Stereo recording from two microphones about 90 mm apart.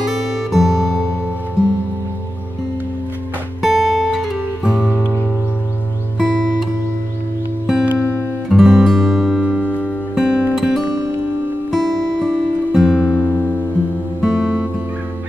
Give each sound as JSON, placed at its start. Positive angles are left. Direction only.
{"t": 0.0, "sound": "music", "side_deg": -5}
{"t": 3.6, "sound": "music", "side_deg": -5}
{"t": 4.9, "sound": "music", "side_deg": 20}
{"t": 6.1, "sound": "music", "side_deg": -5}
{"t": 7.6, "sound": "music", "side_deg": -5}
{"t": 9.6, "sound": "music", "side_deg": 15}
{"t": 10.1, "sound": "music", "side_deg": -10}
{"t": 14.2, "sound": "music", "side_deg": -5}